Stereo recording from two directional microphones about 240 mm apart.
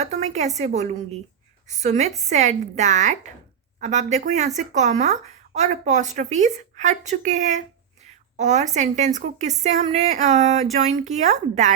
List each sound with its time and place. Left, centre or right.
0.0 s a woman's voice: right